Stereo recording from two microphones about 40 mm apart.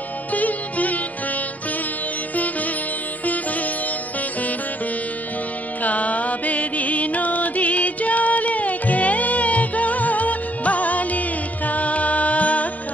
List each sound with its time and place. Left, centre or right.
0.3 s music: left
2.3 s music: left
5.8 s music: left